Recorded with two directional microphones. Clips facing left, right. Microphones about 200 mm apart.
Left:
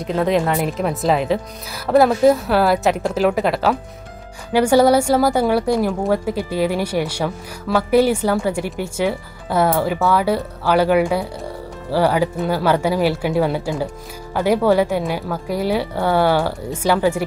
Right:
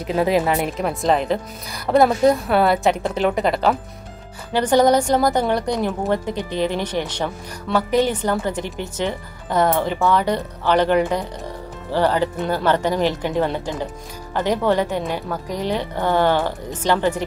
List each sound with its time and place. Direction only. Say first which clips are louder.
0.0 s a woman's voice: left 1 dB; 5° right (ahead or behind)